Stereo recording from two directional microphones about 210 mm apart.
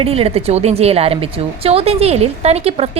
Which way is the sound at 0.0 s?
25° right (ahead or behind).